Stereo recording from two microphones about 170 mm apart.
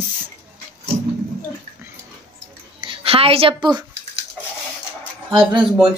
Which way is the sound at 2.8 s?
30° right (ahead or behind).